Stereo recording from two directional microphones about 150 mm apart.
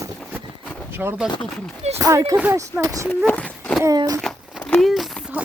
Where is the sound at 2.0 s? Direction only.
20° right (ahead or behind).